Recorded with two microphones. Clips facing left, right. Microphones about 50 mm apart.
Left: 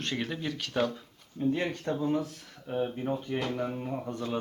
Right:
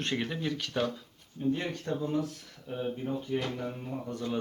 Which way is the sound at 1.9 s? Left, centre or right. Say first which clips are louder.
Even; left.